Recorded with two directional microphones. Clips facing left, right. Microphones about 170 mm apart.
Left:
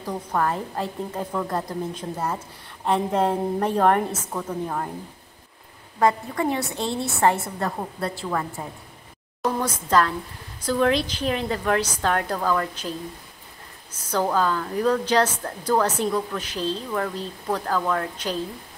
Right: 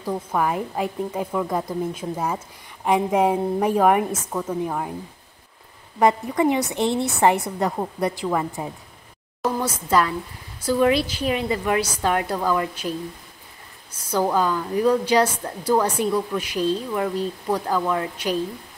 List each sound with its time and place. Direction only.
0.0 s a woman's voice: 10° right (ahead or behind)
5.9 s a woman's voice: 20° right (ahead or behind)
14.1 s a woman's voice: 10° right (ahead or behind)